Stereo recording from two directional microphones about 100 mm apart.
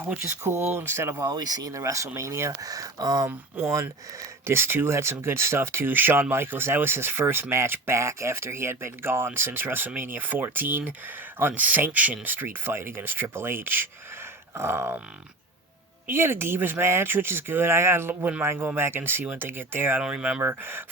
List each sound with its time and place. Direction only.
0.0 s speech: 25° right (ahead or behind)
1.3 s speech: 40° right (ahead or behind)
3.2 s speech: 30° right (ahead or behind)
16.0 s speech: 25° right (ahead or behind)
20.0 s speech: 10° right (ahead or behind)
20.4 s speech: 20° right (ahead or behind)